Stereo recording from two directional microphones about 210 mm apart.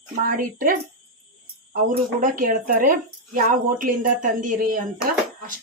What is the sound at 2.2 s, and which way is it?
A woman's voice, 40° right (ahead or behind).